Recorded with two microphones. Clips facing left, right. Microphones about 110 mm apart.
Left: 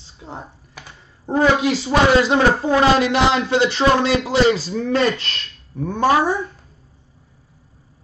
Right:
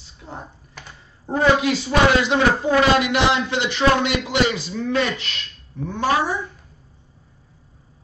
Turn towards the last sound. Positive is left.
turn(degrees=45)  # may be behind; listen again after turning